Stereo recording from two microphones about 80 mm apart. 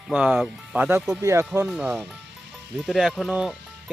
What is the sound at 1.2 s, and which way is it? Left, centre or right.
Speech, right.